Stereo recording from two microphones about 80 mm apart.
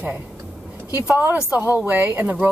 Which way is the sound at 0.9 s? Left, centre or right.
Right.